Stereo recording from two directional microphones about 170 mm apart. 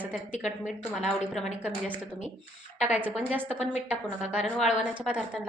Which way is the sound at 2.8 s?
5° right (ahead or behind).